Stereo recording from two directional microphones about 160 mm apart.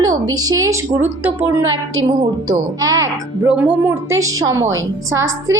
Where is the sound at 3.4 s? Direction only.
5° right (ahead or behind).